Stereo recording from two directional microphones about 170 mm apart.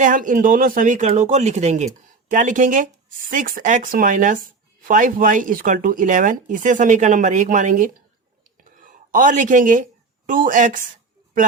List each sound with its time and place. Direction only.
0.0 s speech: 50° right (ahead or behind)
8.5 s a sound: 50° right (ahead or behind)
10.2 s speech: 50° right (ahead or behind)